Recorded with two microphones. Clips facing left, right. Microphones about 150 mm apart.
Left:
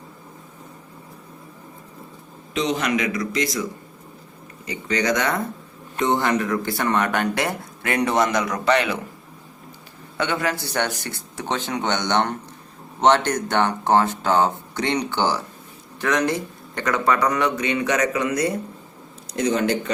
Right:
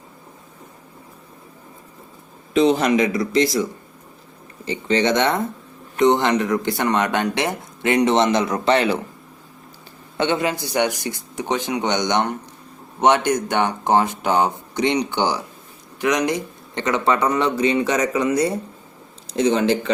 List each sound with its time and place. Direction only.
2.5 s speech: 35° right (ahead or behind)
10.2 s speech: 25° right (ahead or behind)